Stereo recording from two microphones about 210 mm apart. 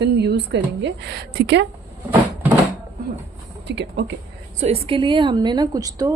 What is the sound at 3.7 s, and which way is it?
Speech, 55° right (ahead or behind).